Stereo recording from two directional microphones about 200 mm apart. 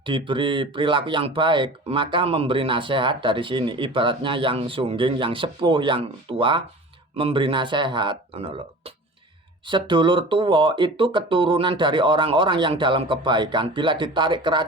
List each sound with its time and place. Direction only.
0.0 s speech: 25° right (ahead or behind)
9.6 s speech: 25° right (ahead or behind)